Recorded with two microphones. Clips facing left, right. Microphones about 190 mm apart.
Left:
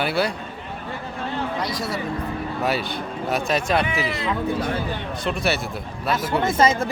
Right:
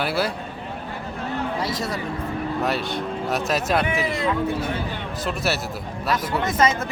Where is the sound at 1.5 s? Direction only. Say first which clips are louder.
Even; 5° right (ahead or behind).